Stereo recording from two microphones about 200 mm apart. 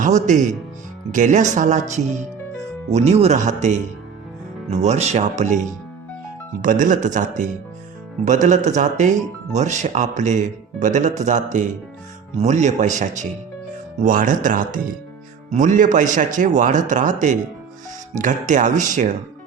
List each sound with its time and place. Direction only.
0.0 s speech: 40° right (ahead or behind)